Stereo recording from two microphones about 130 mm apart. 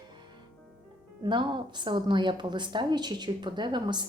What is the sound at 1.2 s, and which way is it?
A woman's voice, 35° right (ahead or behind).